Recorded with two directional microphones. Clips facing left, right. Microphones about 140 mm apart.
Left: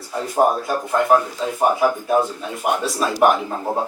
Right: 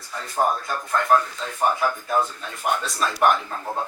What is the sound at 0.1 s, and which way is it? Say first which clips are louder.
Speech: left 6 dB; 25° left (ahead or behind).